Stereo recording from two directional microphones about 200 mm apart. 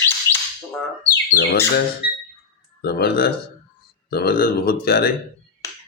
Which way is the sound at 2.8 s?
50° left (ahead or behind).